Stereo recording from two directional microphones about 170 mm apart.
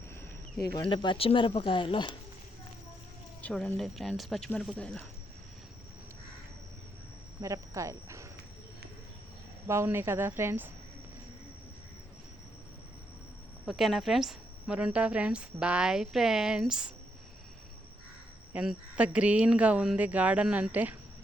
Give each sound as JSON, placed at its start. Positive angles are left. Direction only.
{"t": 0.8, "sound": "speech", "side_deg": 30}
{"t": 3.4, "sound": "a woman's voice", "side_deg": 5}
{"t": 7.4, "sound": "speech", "side_deg": -20}
{"t": 9.6, "sound": "speech", "side_deg": -15}
{"t": 13.7, "sound": "a woman's voice", "side_deg": 0}
{"t": 18.5, "sound": "speech", "side_deg": -5}